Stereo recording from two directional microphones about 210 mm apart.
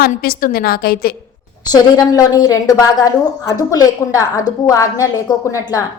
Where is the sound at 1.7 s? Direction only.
15° left (ahead or behind).